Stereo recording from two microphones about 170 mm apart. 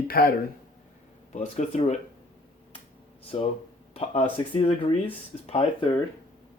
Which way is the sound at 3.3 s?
35° left (ahead or behind).